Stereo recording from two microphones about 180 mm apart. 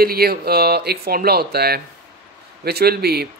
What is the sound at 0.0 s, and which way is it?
A man's voice, 60° right (ahead or behind).